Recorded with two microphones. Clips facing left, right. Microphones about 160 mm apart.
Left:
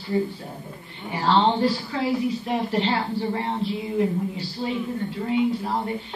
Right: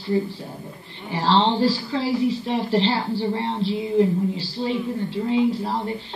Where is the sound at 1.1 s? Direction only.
30° right (ahead or behind).